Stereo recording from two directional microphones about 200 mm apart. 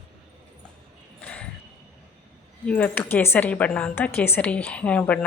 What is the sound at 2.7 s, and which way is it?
A woman's voice, 10° left (ahead or behind).